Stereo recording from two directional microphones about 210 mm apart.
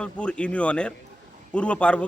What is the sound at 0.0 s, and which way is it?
A man's voice, 5° left (ahead or behind).